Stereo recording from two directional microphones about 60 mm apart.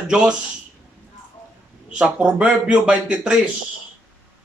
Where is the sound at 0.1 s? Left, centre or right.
Centre.